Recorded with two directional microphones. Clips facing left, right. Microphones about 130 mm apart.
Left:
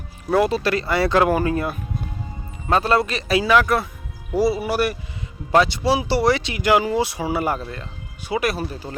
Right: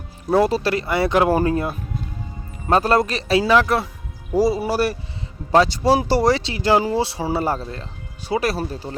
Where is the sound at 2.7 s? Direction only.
40° right (ahead or behind).